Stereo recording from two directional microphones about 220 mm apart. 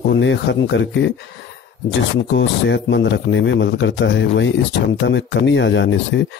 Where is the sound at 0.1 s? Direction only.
55° left (ahead or behind).